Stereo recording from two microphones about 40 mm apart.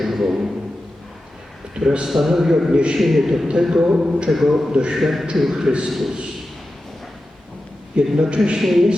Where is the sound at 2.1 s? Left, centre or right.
Centre.